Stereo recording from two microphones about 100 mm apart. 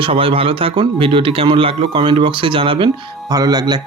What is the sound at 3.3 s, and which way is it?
Speech, 40° right (ahead or behind).